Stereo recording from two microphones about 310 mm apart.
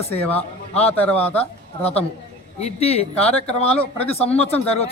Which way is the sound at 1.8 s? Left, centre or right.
Centre.